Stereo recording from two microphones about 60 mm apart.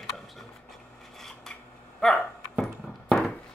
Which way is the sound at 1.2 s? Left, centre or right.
Centre.